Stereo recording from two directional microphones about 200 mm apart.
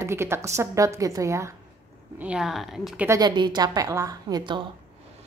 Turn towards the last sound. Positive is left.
turn(degrees=-20)  # may be behind; listen again after turning